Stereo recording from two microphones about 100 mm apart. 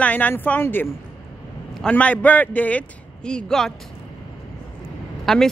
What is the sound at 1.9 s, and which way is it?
A woman's voice, 15° left (ahead or behind).